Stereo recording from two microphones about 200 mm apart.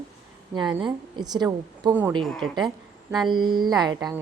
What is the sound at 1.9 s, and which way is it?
Speech, 10° right (ahead or behind).